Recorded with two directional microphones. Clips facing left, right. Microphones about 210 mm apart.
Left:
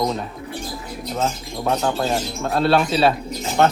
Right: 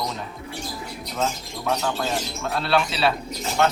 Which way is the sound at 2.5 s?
45° left (ahead or behind).